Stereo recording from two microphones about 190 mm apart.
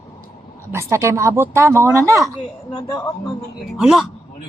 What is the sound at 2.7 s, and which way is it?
Speech, 20° left (ahead or behind).